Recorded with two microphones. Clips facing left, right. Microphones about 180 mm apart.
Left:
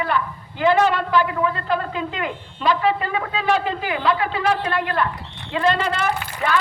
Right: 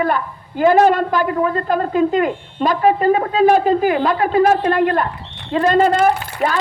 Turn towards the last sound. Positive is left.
turn(degrees=-40)  # may be behind; listen again after turning